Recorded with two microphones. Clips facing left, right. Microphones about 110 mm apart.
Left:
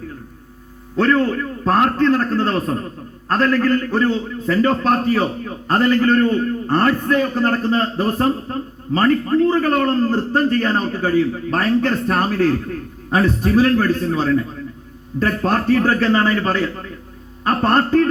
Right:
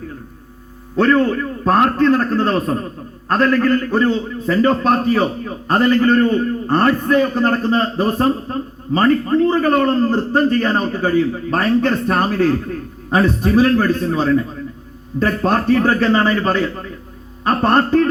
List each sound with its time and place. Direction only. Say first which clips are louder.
0.9 s a man's voice: right 2 dB; 15° right (ahead or behind)